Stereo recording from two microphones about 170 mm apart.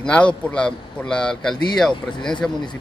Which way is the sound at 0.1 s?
5° left (ahead or behind).